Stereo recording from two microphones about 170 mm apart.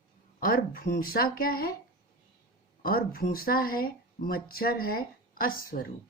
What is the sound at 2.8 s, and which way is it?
Speech, 60° left (ahead or behind).